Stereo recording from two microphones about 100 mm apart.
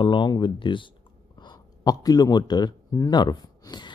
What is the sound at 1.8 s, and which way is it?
Speech, 40° left (ahead or behind).